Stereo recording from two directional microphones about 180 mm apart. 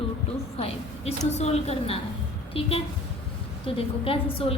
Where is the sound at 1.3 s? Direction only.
35° left (ahead or behind).